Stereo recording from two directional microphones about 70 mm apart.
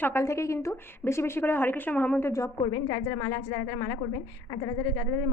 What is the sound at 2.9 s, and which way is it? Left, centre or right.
A woman's voice, left.